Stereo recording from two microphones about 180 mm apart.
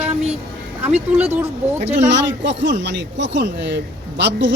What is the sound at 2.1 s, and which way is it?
Speech, 80° right.